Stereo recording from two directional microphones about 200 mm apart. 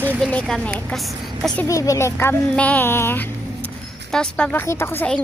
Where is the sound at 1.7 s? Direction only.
15° left (ahead or behind).